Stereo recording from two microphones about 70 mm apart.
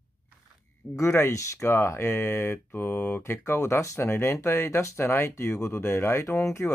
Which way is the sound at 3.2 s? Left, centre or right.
Left.